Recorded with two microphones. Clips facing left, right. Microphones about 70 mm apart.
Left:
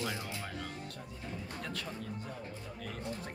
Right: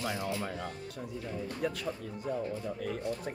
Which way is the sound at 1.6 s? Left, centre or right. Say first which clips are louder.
Right 9 dB; centre.